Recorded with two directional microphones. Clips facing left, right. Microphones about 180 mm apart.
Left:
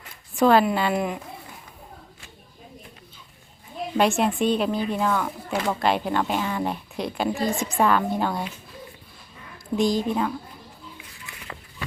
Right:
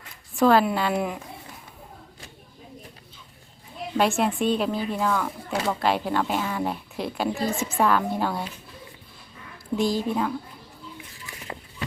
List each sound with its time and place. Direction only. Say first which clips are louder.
0.3 s a woman's voice: left 1 dB; centre (ahead or behind)
3.9 s a woman's voice: left 1 dB; centre (ahead or behind)
9.7 s a woman's voice: left 2 dB; 5° right (ahead or behind)
11.3 s a sound: right 2 dB; 35° right (ahead or behind)